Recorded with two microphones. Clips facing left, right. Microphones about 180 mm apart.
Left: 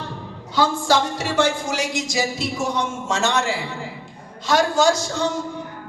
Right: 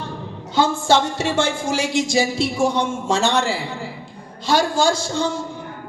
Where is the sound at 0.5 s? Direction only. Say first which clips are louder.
Right 2 dB; 25° right (ahead or behind).